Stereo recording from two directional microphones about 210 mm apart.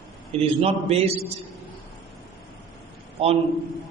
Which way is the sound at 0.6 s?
30° right (ahead or behind).